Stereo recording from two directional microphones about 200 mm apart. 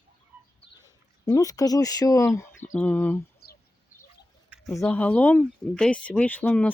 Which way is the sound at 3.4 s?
50° left (ahead or behind).